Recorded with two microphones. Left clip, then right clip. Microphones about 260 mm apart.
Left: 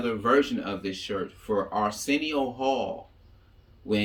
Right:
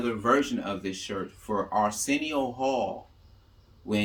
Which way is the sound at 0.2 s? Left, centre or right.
Right.